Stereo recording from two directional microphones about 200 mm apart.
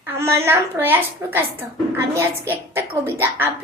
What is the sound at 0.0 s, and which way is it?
A woman's voice, 10° right (ahead or behind).